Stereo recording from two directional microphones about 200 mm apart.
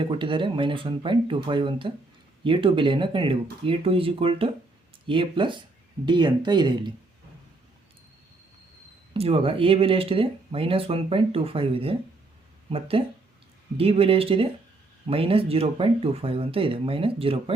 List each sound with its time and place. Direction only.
0.0 s speech: 25° right (ahead or behind)
9.1 s speech: 30° right (ahead or behind)